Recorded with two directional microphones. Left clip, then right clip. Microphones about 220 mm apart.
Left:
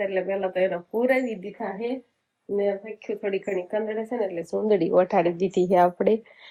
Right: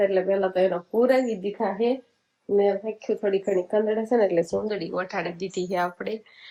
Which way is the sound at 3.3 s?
15° right (ahead or behind).